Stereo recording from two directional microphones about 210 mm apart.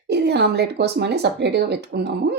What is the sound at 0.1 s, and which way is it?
Speech, 50° right (ahead or behind).